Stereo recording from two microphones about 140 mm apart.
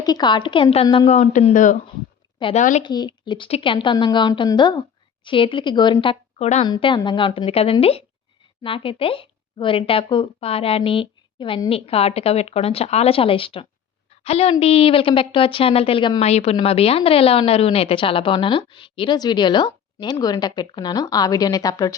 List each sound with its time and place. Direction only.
0.0 s a woman's voice: 30° left (ahead or behind); by 1.3 s 45° left (ahead or behind)
1.3 s speech: 65° left (ahead or behind)
2.4 s speech: 45° left (ahead or behind)
2.8 s a woman's voice: 30° left (ahead or behind)
6.4 s speech: 55° left (ahead or behind)
6.7 s a woman's voice: 35° left (ahead or behind)
16.2 s a woman's voice: 50° left (ahead or behind); by 21.9 s 25° left (ahead or behind)